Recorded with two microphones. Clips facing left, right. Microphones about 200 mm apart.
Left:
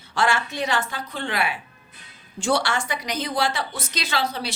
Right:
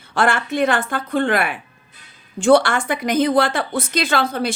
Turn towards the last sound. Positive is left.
turn(degrees=-50)  # may be behind; listen again after turning